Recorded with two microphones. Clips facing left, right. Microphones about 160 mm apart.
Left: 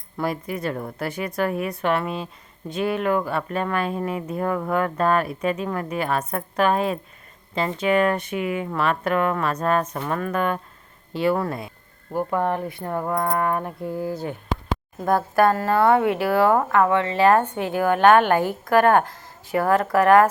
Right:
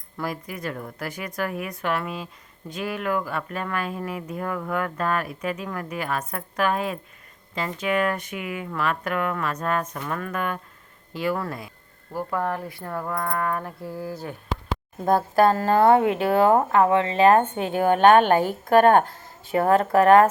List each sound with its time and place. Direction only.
0.2 s a woman's voice: 25° left (ahead or behind)
15.0 s speech: 25° right (ahead or behind)